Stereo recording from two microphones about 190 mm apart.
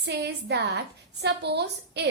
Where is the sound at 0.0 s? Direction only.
65° right (ahead or behind).